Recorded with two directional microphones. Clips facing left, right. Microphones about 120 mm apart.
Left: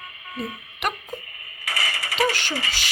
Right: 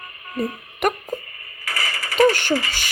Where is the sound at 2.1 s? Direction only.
50° right (ahead or behind).